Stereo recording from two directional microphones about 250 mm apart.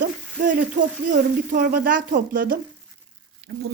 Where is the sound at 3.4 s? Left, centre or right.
Right.